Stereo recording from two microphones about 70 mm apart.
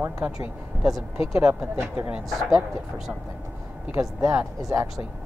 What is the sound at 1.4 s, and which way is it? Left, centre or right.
Speech, centre.